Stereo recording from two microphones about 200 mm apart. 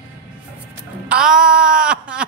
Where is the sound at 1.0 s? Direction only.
5° right (ahead or behind).